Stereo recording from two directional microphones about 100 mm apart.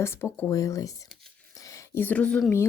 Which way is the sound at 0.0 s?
25° left (ahead or behind).